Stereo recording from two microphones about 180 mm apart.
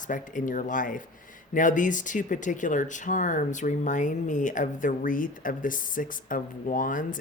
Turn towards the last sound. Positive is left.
turn(degrees=50)  # may be behind; listen again after turning